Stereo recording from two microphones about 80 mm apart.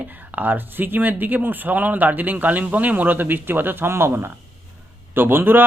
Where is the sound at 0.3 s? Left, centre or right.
Right.